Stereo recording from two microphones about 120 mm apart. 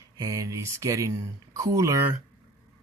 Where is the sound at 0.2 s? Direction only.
30° right (ahead or behind).